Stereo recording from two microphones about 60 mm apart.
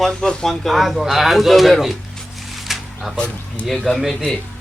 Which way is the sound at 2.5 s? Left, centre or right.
Centre.